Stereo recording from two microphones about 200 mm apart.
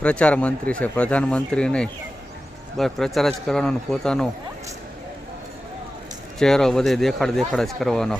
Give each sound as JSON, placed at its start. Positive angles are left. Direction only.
{"t": 0.0, "sound": "speech", "side_deg": 5}
{"t": 6.4, "sound": "speech", "side_deg": 0}